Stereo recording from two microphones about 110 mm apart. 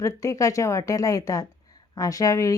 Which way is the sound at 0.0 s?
30° left (ahead or behind).